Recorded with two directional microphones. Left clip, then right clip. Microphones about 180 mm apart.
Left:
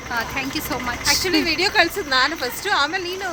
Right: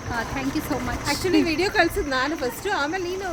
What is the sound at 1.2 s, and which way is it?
A woman's voice, 20° right (ahead or behind).